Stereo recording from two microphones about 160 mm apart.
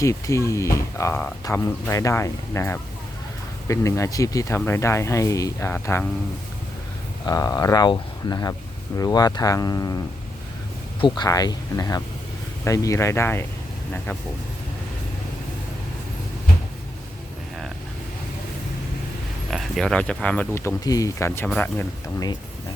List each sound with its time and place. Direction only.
0.0 s speech: 20° left (ahead or behind)
7.3 s speech: 25° left (ahead or behind)
11.0 s speech: 25° left (ahead or behind)
19.5 s speech: centre (ahead or behind)